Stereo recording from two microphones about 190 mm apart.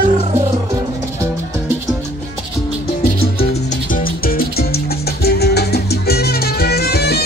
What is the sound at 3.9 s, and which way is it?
Music, 50° left (ahead or behind).